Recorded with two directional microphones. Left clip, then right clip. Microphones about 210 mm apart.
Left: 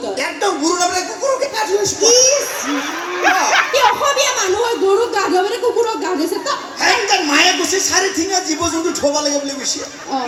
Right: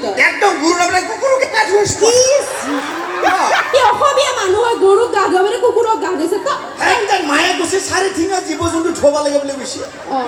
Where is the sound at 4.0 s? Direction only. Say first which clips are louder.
Right 3 dB; 25° left (ahead or behind).